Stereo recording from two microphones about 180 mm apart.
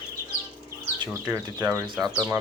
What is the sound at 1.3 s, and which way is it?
Speech, 15° right (ahead or behind).